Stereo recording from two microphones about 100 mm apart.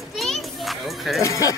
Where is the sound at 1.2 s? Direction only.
35° left (ahead or behind).